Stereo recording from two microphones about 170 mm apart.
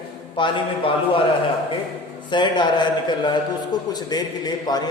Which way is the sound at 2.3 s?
25° left (ahead or behind).